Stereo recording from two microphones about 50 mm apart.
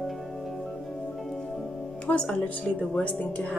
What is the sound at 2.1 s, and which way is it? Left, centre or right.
A woman's voice, left.